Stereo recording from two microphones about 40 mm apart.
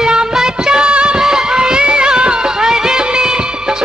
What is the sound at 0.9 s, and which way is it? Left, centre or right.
Music, right.